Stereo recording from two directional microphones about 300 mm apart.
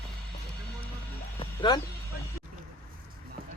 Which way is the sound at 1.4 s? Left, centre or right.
Centre.